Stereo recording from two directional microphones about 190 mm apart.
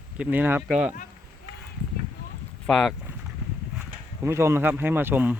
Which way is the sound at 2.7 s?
Centre (ahead or behind).